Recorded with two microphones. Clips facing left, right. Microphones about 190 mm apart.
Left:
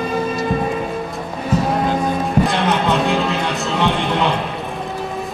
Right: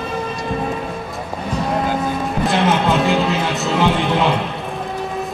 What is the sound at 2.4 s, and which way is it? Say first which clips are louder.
Music: right 1 dB; centre (ahead or behind).